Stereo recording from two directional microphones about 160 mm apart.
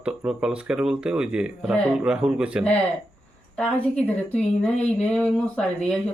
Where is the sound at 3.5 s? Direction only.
5° left (ahead or behind).